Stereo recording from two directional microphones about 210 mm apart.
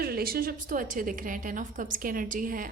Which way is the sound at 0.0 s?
45° right (ahead or behind).